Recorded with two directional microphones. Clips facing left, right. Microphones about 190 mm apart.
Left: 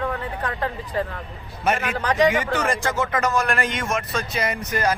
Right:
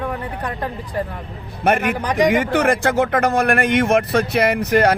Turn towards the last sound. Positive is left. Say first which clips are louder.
# right 8 dB
turn(degrees=-65)  # may be behind; listen again after turning